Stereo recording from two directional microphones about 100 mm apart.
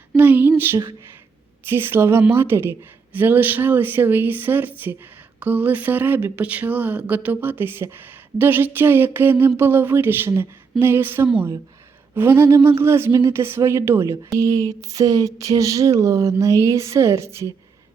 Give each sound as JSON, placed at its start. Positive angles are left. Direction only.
{"t": 0.2, "sound": "speech", "side_deg": -20}